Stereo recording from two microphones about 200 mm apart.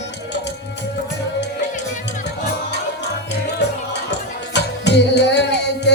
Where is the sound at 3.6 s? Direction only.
60° left (ahead or behind).